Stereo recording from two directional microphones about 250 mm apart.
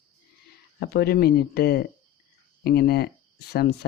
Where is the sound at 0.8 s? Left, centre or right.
Left.